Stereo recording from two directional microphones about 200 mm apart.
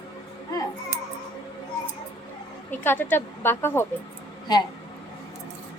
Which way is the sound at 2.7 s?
10° left (ahead or behind).